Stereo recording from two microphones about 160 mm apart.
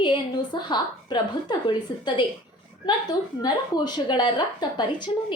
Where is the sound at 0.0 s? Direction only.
30° left (ahead or behind).